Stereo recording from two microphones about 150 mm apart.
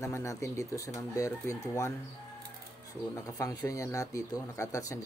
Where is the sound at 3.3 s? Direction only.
20° left (ahead or behind).